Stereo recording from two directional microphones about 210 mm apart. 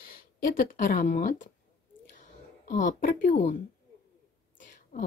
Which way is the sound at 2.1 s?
40° left (ahead or behind).